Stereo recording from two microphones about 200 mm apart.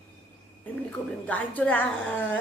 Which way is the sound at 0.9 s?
5° left (ahead or behind).